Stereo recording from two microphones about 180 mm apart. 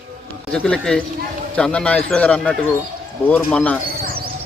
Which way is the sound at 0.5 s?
5° left (ahead or behind).